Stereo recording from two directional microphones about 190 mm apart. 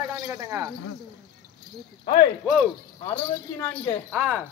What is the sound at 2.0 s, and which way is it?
Speech, 30° left (ahead or behind).